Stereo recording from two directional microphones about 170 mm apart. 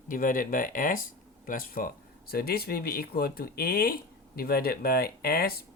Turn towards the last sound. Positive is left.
turn(degrees=65)  # may be behind; listen again after turning